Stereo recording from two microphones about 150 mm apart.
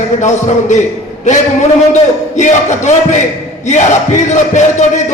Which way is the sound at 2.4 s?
55° left (ahead or behind).